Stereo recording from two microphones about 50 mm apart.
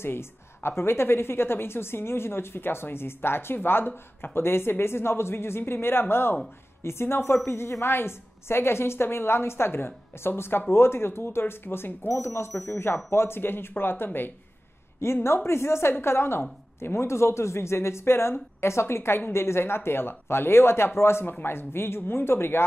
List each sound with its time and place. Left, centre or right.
0.0 s a woman's voice: left
12.1 s speech: left
12.8 s a woman's voice: left
15.2 s a woman's voice: left